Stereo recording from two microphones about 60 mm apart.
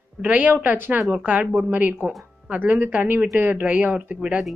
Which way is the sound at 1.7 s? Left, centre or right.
Right.